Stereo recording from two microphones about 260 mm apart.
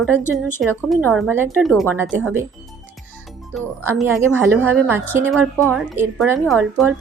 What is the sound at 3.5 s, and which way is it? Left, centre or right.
Speech, centre.